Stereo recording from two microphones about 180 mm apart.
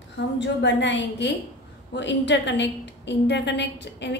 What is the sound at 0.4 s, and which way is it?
A woman's voice, 80° left.